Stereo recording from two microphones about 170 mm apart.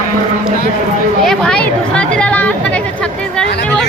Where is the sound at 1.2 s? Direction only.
5° left (ahead or behind).